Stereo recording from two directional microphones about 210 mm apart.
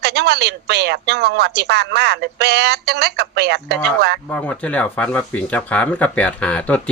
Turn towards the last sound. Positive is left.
turn(degrees=5)  # may be behind; listen again after turning